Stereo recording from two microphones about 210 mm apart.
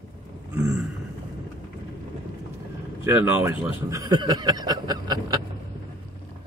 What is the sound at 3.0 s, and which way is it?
A man's voice, 10° right (ahead or behind).